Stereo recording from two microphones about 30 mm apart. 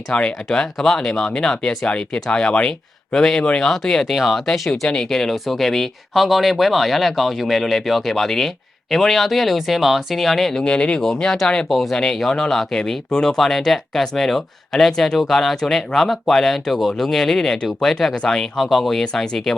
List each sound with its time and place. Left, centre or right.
0.1 s speech: left
3.2 s speech: centre
4.9 s speech: centre
6.1 s speech: centre
10.6 s speech: left
10.9 s speech: centre
11.7 s speech: centre
14.8 s speech: centre
18.1 s speech: left
18.5 s speech: centre
19.1 s speech: left